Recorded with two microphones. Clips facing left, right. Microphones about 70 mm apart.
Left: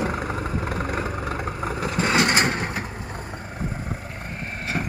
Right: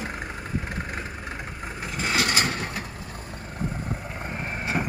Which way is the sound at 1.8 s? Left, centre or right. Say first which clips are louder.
Left 5 dB; left.